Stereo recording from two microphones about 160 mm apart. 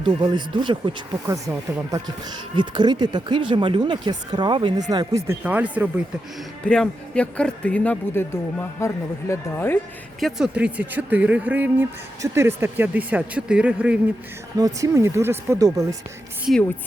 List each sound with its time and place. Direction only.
0.0 s speech: 30° right (ahead or behind)
2.6 s speech: 30° right (ahead or behind); by 6.1 s 10° right (ahead or behind)
6.7 s a man's voice: 5° left (ahead or behind)
10.2 s speech: centre (ahead or behind)
14.6 s speech: 20° right (ahead or behind)